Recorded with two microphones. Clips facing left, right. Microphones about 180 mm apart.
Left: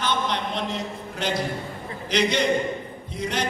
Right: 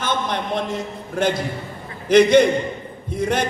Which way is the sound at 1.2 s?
50° right (ahead or behind).